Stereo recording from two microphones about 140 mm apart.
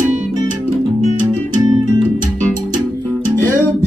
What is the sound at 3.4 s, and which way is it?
Music, 15° left (ahead or behind).